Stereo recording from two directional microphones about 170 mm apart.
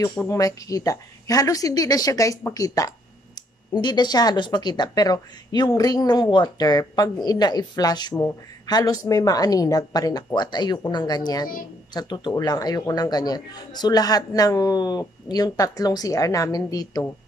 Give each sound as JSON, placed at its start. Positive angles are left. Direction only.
{"t": 0.3, "sound": "speech", "side_deg": 20}